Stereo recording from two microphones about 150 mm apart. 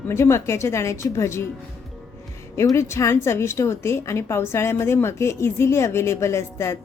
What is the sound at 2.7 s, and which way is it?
A woman's voice, 20° left (ahead or behind).